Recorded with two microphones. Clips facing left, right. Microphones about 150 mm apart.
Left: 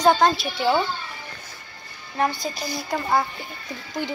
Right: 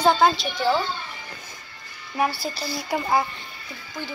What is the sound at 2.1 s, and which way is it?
Speech, 5° right (ahead or behind).